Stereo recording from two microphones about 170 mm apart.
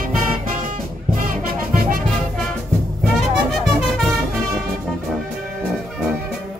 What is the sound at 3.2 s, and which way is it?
Music, centre (ahead or behind).